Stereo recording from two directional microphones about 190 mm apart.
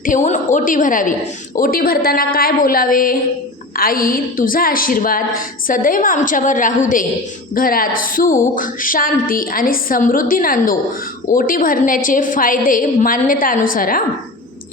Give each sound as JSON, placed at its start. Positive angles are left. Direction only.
{"t": 0.0, "sound": "a woman's voice", "side_deg": 40}